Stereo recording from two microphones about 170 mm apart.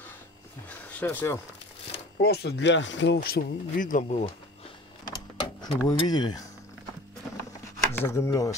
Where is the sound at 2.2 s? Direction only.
75° left (ahead or behind); by 4.3 s 45° left (ahead or behind).